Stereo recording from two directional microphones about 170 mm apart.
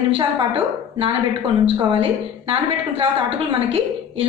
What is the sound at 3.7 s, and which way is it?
Speech, 35° right (ahead or behind).